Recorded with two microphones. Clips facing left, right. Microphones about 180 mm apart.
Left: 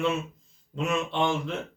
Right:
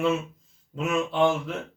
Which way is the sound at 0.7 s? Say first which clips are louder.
Right 2 dB; 5° right (ahead or behind).